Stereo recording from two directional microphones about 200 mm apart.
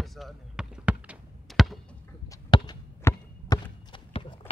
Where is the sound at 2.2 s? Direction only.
20° left (ahead or behind).